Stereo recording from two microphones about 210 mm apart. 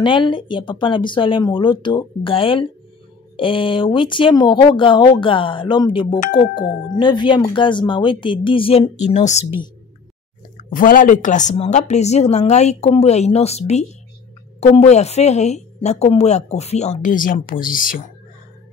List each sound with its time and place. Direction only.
0.0 s speech: 20° left (ahead or behind)
6.1 s a woman's voice: 40° left (ahead or behind)
7.0 s speech: 25° left (ahead or behind)
10.6 s a woman's voice: 40° left (ahead or behind)